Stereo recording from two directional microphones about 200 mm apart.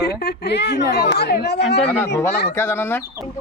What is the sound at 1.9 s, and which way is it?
A woman's voice, 10° left (ahead or behind).